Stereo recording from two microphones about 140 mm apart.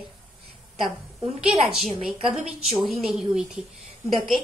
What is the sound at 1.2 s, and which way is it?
A woman's voice, 5° right (ahead or behind).